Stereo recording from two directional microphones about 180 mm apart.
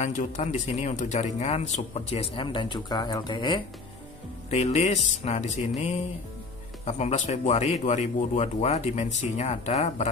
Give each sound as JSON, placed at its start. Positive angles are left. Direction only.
{"t": 0.0, "sound": "speech", "side_deg": 45}
{"t": 4.5, "sound": "speech", "side_deg": 40}